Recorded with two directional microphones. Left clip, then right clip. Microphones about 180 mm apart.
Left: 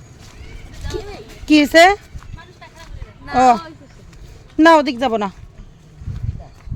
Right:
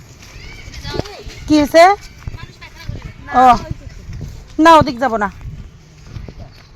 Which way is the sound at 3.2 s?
5° left (ahead or behind).